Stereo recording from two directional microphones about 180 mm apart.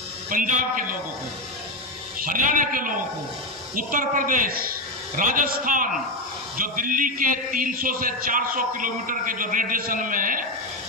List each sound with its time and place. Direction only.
0.3 s speech: 50° right (ahead or behind)
2.2 s speech: 45° right (ahead or behind)